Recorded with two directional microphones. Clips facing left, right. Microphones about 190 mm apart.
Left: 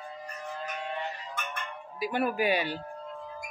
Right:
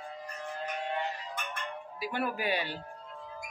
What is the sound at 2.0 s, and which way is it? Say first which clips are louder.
Speech: left 6 dB; 15° left (ahead or behind).